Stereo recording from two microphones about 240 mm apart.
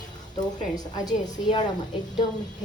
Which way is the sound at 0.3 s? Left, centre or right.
Centre.